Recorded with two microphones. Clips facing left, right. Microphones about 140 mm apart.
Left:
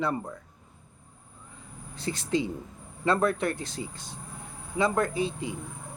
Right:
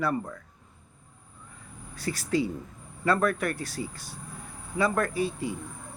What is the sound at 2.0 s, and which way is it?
Speech, 25° left (ahead or behind).